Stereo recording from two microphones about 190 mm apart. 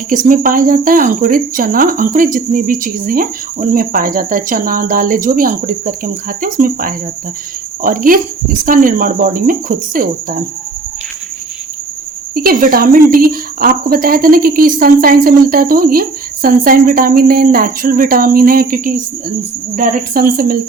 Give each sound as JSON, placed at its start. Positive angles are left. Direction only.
{"t": 0.3, "sound": "speech", "side_deg": -45}
{"t": 12.3, "sound": "speech", "side_deg": -50}